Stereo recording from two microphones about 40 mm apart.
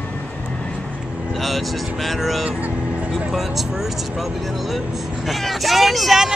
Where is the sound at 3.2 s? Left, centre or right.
Centre.